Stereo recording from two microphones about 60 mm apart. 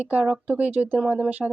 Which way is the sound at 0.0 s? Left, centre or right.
Right.